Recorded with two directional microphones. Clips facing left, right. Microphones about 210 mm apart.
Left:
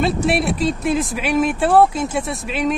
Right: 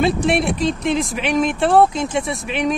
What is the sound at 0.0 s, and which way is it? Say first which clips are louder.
Speech: right 1 dB; 5° left (ahead or behind).